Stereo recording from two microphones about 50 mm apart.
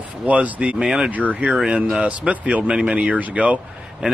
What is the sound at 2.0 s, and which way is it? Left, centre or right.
Speech, right.